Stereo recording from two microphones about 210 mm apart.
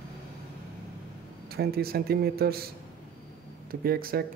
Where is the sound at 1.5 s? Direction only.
50° right (ahead or behind).